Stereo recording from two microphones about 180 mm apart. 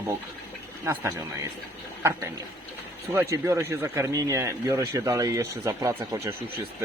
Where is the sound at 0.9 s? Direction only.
15° right (ahead or behind).